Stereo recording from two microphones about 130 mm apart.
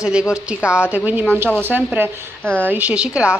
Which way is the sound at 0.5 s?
10° right (ahead or behind).